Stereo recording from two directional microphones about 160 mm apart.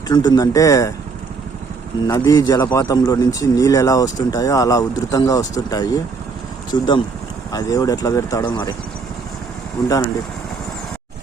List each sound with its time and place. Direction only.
0.1 s a man's voice: 25° left (ahead or behind)
2.0 s a man's voice: 25° left (ahead or behind)